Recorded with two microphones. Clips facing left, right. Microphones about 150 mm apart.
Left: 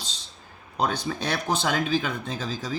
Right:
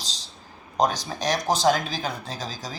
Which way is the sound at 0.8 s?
35° right (ahead or behind).